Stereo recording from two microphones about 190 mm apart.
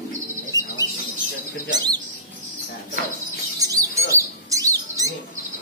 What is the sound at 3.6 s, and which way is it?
Bird, 20° right (ahead or behind).